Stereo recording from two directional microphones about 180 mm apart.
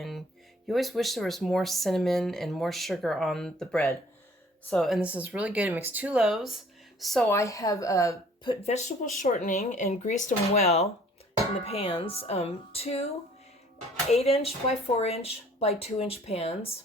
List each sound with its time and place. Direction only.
0.7 s speech: centre (ahead or behind)
7.3 s speech: 15° left (ahead or behind)
8.6 s speech: 40° left (ahead or behind)
14.1 s speech: 35° left (ahead or behind)